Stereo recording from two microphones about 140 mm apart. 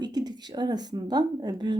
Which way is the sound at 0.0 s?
30° right (ahead or behind).